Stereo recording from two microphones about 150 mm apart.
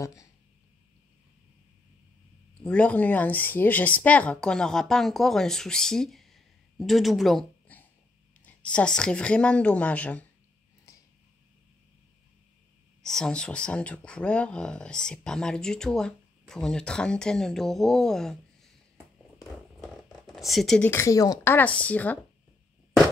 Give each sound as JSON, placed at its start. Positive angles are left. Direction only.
{"t": 0.0, "sound": "speech", "side_deg": 20}
{"t": 2.6, "sound": "a woman's voice", "side_deg": 10}
{"t": 13.0, "sound": "speech", "side_deg": 5}
{"t": 19.8, "sound": "zipper", "side_deg": 0}
{"t": 20.9, "sound": "speech", "side_deg": 20}
{"t": 21.5, "sound": "a woman's voice", "side_deg": 10}